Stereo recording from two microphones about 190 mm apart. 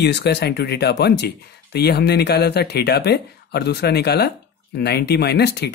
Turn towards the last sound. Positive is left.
turn(degrees=60)  # may be behind; listen again after turning